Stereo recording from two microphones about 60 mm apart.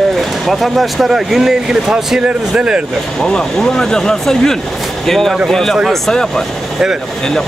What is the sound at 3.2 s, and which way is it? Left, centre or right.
Speech, centre.